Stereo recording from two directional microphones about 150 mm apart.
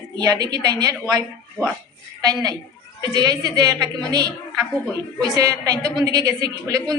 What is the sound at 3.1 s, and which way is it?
A woman's voice, 25° right (ahead or behind).